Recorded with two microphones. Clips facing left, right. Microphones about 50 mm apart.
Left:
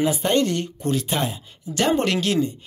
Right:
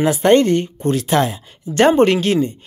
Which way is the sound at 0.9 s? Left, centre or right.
Right.